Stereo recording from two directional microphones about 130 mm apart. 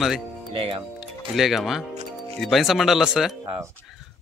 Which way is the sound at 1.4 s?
Centre (ahead or behind).